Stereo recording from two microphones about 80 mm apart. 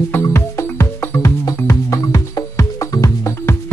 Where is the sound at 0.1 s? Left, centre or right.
Left.